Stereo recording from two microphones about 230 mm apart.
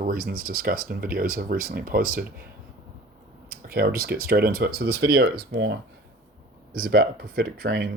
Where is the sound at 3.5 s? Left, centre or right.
Right.